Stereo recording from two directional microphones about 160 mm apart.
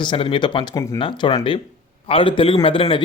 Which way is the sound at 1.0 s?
30° left (ahead or behind).